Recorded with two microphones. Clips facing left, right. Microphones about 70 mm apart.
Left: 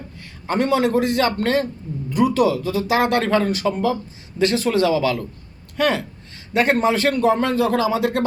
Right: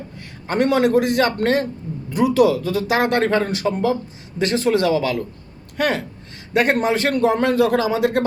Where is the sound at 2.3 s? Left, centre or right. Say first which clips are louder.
Right 2 dB; right.